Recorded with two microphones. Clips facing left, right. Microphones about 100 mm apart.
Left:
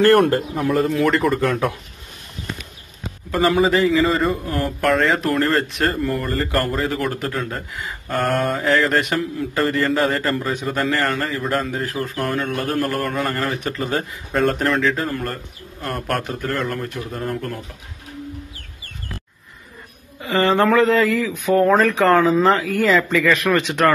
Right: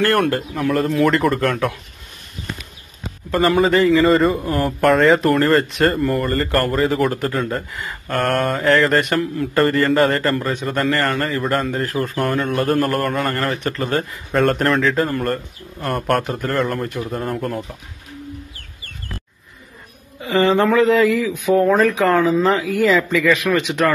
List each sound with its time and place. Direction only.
0.6 s a man's voice: centre (ahead or behind)
3.3 s a man's voice: centre (ahead or behind)
20.7 s speech: 20° right (ahead or behind); by 22.4 s 5° right (ahead or behind)
22.8 s speech: 15° right (ahead or behind)